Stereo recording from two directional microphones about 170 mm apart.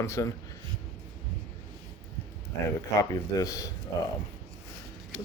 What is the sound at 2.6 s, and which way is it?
Speech, 20° left (ahead or behind).